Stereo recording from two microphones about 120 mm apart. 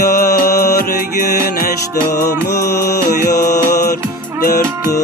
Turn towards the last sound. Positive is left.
turn(degrees=30)  # may be behind; listen again after turning